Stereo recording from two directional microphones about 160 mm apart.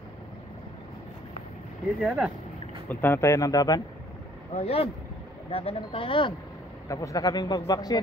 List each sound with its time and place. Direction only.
2.0 s speech: centre (ahead or behind)
2.9 s a man's voice: 15° left (ahead or behind)
4.6 s speech: 40° left (ahead or behind)
6.9 s a man's voice: 20° left (ahead or behind)